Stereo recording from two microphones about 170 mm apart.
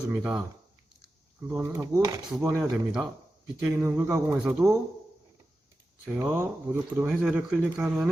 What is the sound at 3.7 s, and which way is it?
Speech, 15° right (ahead or behind).